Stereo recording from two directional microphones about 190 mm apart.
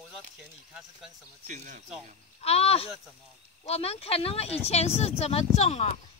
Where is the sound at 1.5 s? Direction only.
40° right (ahead or behind).